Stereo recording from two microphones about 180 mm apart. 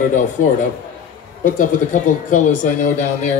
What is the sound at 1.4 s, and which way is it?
Speech, 45° left (ahead or behind).